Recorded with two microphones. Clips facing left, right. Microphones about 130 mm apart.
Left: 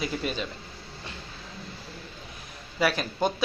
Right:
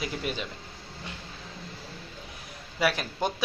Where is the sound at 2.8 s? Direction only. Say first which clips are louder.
Left 2 dB; 15° right (ahead or behind).